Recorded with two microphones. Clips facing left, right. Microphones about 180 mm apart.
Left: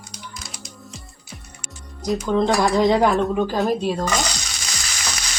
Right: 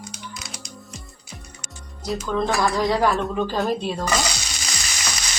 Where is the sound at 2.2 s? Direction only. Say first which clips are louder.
Left 3 dB; 20° left (ahead or behind).